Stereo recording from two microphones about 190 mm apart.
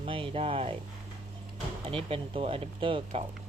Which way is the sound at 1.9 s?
30° right (ahead or behind).